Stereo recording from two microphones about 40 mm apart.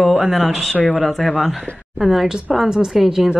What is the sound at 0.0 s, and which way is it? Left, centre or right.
Speech, centre.